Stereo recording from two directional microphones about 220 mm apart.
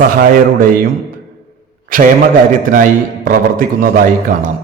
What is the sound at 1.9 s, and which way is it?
A man's voice, 40° right (ahead or behind).